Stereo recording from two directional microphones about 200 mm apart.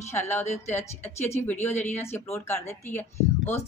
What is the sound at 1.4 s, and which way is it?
A woman's voice, 10° left (ahead or behind).